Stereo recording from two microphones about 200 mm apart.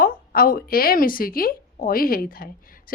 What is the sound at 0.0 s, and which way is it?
A woman's voice, 45° left (ahead or behind).